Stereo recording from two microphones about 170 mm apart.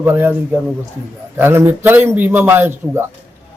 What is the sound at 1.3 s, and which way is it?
A man's voice, 15° right (ahead or behind).